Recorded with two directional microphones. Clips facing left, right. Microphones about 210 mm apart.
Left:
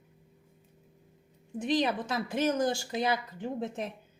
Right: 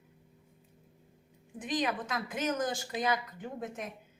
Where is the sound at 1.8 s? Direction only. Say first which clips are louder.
Left 3 dB; 30° left (ahead or behind).